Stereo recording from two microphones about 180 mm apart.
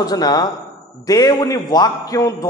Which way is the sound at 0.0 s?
20° left (ahead or behind).